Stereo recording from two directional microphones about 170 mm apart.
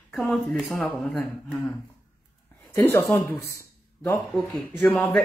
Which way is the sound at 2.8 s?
15° left (ahead or behind).